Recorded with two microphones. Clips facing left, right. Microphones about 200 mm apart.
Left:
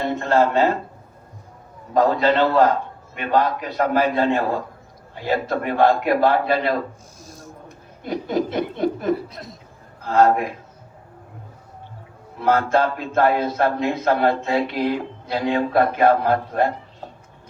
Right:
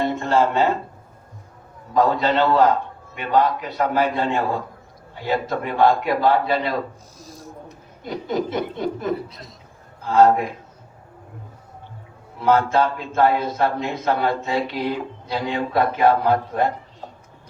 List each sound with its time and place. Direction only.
0.2 s a sound: 50° left (ahead or behind)
1.9 s a man's voice: 50° left (ahead or behind)
8.0 s speech: 55° left (ahead or behind)
12.4 s speech: 55° left (ahead or behind)